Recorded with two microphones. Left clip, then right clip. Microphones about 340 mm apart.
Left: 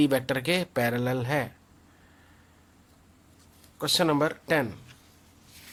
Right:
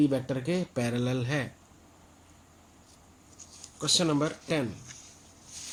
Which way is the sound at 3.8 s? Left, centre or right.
Left.